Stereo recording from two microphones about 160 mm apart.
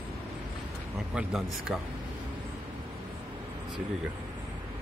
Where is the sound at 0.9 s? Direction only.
5° right (ahead or behind).